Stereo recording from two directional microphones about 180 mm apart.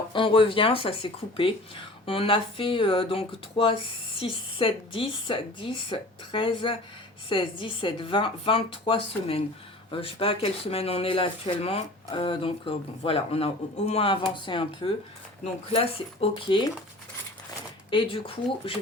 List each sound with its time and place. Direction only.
0.1 s speech: 25° left (ahead or behind)
17.9 s speech: 30° left (ahead or behind)